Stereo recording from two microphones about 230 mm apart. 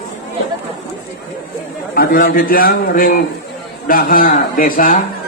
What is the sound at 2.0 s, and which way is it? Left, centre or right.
A man's voice, left.